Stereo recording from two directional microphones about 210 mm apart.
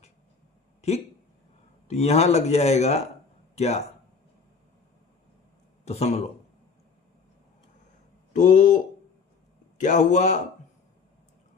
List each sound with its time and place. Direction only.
0.8 s a man's voice: 30° left (ahead or behind)
5.8 s speech: 30° left (ahead or behind)
8.3 s speech: 35° left (ahead or behind)